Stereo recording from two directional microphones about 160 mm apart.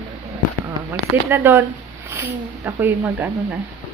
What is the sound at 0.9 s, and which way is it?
Speech, 15° right (ahead or behind).